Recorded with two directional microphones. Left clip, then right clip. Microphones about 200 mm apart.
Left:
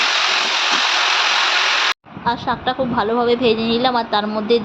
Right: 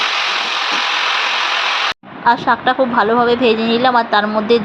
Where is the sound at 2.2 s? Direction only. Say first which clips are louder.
Right 8 dB; 15° right (ahead or behind).